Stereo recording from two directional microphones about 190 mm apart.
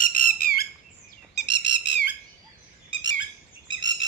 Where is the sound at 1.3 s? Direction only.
65° left (ahead or behind).